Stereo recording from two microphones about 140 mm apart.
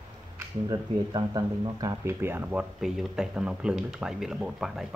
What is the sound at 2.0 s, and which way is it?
Speech, 15° right (ahead or behind).